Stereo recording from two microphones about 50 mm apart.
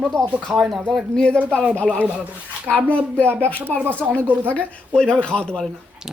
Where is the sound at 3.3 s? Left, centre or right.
Right.